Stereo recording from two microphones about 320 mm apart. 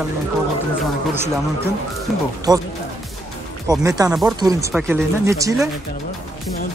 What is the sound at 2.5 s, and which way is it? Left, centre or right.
Speech, centre.